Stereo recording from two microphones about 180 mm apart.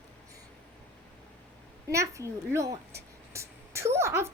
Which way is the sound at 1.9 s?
15° right (ahead or behind).